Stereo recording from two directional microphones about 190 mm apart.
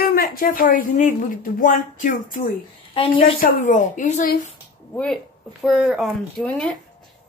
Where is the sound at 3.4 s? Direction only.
40° left (ahead or behind).